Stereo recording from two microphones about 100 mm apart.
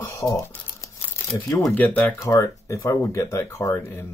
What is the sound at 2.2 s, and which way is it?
Speech, 30° left (ahead or behind).